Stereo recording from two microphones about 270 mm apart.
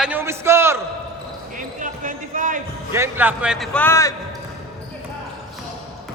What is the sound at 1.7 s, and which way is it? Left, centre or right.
Basketball bounce, right.